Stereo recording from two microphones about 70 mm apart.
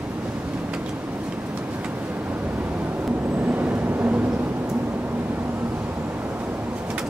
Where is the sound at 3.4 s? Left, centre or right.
Right.